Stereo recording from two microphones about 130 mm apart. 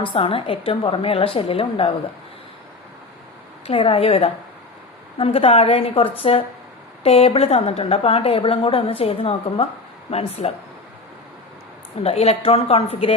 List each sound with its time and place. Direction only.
0.0 s a woman's voice: 45° left (ahead or behind)
3.7 s a woman's voice: 45° left (ahead or behind)
12.0 s a woman's voice: 50° left (ahead or behind)